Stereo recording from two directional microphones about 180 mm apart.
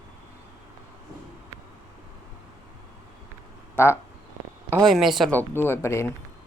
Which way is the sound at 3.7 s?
15° left (ahead or behind).